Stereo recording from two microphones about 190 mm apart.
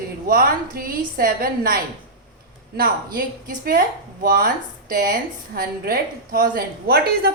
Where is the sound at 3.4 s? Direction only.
50° right (ahead or behind).